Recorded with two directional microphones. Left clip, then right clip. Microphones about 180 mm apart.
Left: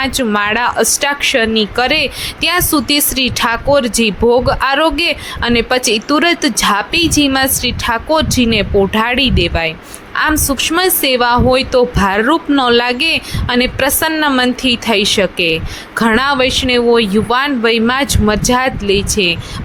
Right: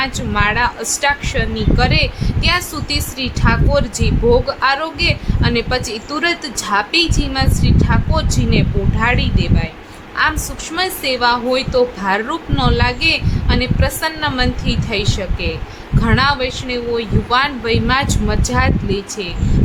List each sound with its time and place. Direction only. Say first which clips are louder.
0.0 s speech: left 3 dB; 40° left (ahead or behind)